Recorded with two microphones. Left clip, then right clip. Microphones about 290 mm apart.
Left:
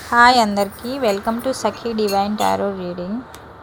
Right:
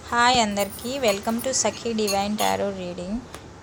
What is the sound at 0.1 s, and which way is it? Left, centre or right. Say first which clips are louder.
A woman's voice: left 7 dB; left.